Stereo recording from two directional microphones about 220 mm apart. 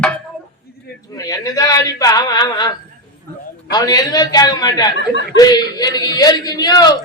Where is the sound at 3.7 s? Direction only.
15° left (ahead or behind).